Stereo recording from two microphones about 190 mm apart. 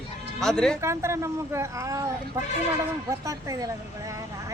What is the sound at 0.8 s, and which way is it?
Speech, 15° right (ahead or behind).